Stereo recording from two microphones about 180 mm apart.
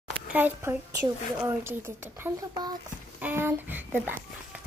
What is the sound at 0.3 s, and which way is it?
Speech, 10° right (ahead or behind).